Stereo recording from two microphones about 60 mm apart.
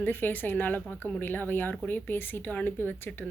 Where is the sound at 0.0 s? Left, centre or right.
Left.